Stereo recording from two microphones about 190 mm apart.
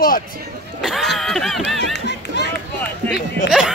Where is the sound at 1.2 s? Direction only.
Centre (ahead or behind).